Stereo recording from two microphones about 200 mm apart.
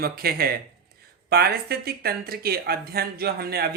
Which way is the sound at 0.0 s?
50° right (ahead or behind).